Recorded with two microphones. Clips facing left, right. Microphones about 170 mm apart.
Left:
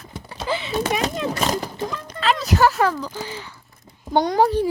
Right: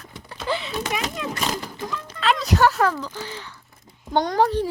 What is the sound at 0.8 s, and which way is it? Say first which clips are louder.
Speech: left 5 dB; 35° left (ahead or behind).